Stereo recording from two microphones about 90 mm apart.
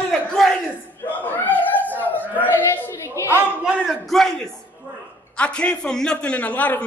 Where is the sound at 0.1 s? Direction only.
5° left (ahead or behind).